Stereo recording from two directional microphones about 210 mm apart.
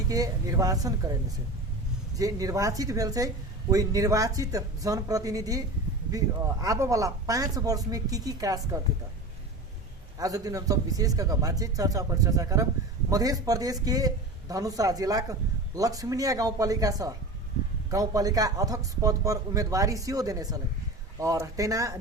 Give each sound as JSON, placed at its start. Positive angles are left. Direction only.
{"t": 0.1, "sound": "a man's voice", "side_deg": -15}
{"t": 2.1, "sound": "a man's voice", "side_deg": -15}
{"t": 10.2, "sound": "a man's voice", "side_deg": -15}